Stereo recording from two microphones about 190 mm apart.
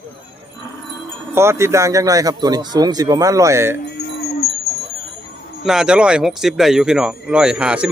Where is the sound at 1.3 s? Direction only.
15° right (ahead or behind).